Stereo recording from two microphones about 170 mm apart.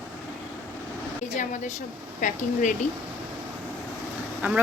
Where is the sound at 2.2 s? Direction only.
50° left (ahead or behind).